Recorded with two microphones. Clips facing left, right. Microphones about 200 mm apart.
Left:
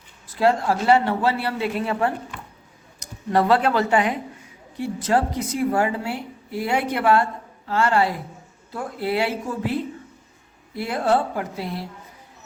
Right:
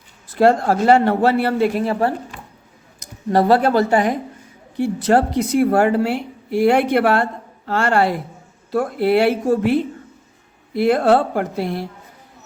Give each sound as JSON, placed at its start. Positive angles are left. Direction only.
{"t": 0.3, "sound": "speech", "side_deg": -50}
{"t": 3.2, "sound": "speech", "side_deg": -40}
{"t": 4.8, "sound": "a woman's voice", "side_deg": -70}